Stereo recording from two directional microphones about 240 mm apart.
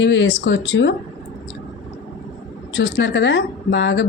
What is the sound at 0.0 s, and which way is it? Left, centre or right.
Speech, left.